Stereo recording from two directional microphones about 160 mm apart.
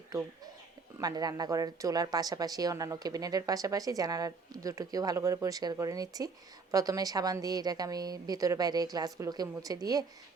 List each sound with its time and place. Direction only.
0.1 s speech: 20° right (ahead or behind)